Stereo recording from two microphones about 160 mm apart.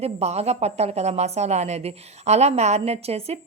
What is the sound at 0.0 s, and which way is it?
A woman's voice, 40° right (ahead or behind).